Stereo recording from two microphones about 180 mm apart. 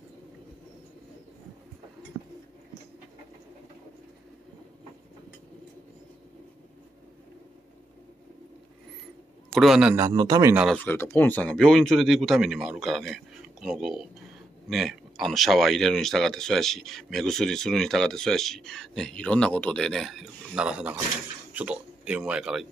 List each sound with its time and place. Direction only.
9.6 s speech: 5° right (ahead or behind)
10.0 s a man's voice: 20° right (ahead or behind)
10.5 s speech: 5° right (ahead or behind)
10.8 s speech: 10° left (ahead or behind)